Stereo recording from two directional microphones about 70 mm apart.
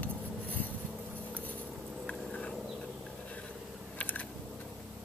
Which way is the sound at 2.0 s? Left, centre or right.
Centre.